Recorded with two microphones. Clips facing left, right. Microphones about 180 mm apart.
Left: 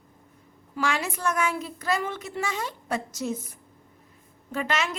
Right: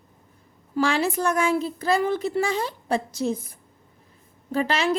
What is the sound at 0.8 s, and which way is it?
A woman's voice, 30° right (ahead or behind).